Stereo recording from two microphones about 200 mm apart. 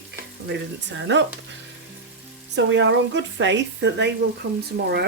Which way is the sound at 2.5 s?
65° right (ahead or behind).